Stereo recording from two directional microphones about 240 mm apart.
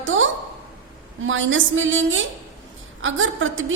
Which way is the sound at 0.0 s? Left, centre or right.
Right.